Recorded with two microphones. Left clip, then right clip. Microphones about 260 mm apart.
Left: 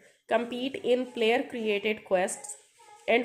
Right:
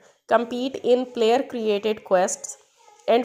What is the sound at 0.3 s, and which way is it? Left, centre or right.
Speech, right.